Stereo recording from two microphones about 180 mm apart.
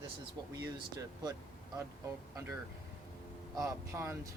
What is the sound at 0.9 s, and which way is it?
Speech, 20° right (ahead or behind).